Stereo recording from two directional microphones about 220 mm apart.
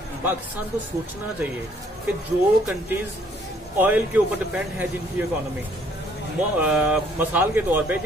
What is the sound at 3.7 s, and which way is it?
Speech, 10° right (ahead or behind).